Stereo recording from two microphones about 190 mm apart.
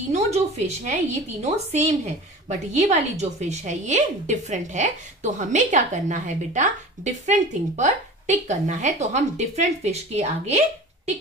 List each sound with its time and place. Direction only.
0.1 s a woman's voice: 35° right (ahead or behind)